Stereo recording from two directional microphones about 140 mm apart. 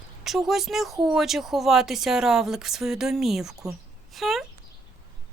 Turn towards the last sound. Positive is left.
turn(degrees=0)  # may be behind; listen again after turning